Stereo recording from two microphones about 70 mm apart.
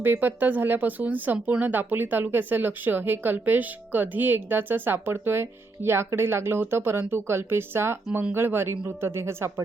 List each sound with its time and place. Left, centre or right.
0.0 s speech: right